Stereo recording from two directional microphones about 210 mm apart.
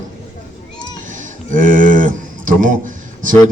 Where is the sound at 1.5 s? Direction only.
40° right (ahead or behind).